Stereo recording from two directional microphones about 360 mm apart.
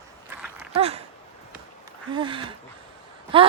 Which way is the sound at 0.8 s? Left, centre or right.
Centre.